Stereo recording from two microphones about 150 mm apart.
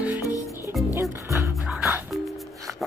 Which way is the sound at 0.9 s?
20° right (ahead or behind).